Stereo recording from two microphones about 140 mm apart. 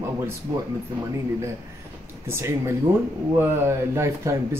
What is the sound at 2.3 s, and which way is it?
Speech, 20° right (ahead or behind).